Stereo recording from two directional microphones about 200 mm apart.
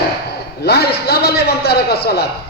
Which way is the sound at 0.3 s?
55° left (ahead or behind).